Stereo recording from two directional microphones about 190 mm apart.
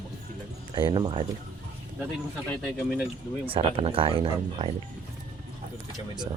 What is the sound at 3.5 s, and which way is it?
Speech, 30° right (ahead or behind).